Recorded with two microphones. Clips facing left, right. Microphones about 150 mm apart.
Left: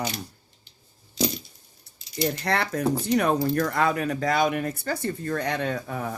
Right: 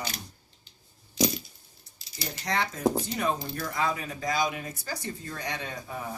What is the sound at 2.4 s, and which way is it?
Speech, 65° left (ahead or behind).